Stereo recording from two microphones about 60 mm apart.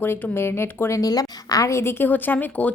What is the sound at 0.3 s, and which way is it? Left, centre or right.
Speech, left.